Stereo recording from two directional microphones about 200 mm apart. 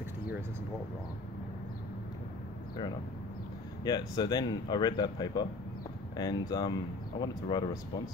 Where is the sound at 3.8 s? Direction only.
20° left (ahead or behind).